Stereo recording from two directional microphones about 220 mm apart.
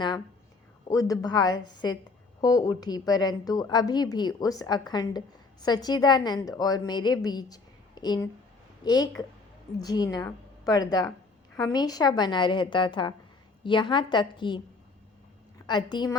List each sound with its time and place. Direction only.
0.9 s a woman's voice: 15° left (ahead or behind)
15.6 s a woman's voice: 20° left (ahead or behind)